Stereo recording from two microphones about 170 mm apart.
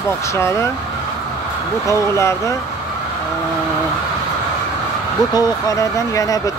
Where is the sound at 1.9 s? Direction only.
15° left (ahead or behind).